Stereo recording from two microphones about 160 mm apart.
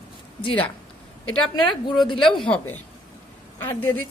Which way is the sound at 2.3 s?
5° left (ahead or behind).